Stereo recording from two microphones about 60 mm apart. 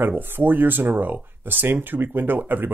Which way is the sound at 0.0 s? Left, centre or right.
Right.